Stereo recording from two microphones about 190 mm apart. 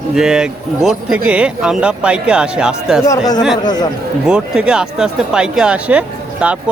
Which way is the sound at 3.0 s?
20° left (ahead or behind).